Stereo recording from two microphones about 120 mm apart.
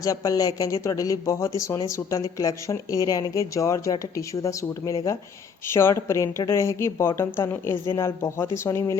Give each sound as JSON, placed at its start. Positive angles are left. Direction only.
{"t": 0.0, "sound": "speech", "side_deg": 30}